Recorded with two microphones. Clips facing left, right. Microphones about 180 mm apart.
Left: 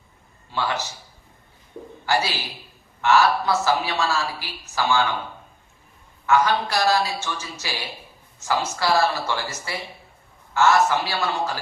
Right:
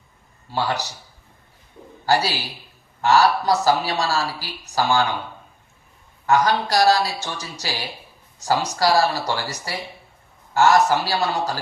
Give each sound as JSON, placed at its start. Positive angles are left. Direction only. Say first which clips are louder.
{"t": 0.5, "sound": "speech", "louder": "right 2 dB", "side_deg": -35}
{"t": 2.0, "sound": "speech", "louder": "right 3 dB", "side_deg": -35}
{"t": 6.2, "sound": "a man's voice", "louder": "right 1 dB", "side_deg": -35}